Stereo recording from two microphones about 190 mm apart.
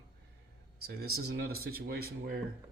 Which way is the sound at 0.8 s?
55° right (ahead or behind).